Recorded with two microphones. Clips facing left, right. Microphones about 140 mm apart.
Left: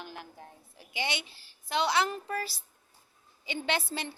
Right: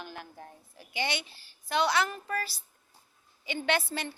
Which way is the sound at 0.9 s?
20° left (ahead or behind).